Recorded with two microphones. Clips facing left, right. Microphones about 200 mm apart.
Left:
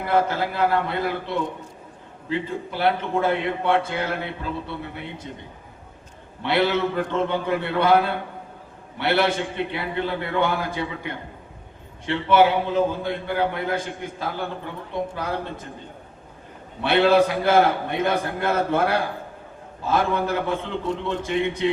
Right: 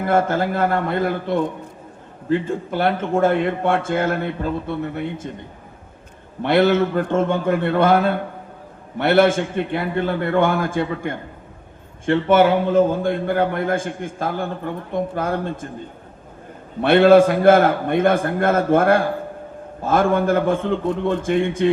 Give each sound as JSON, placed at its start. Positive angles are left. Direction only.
{"t": 0.0, "sound": "a man's voice", "side_deg": -50}
{"t": 6.4, "sound": "a man's voice", "side_deg": -50}
{"t": 16.8, "sound": "a man's voice", "side_deg": -50}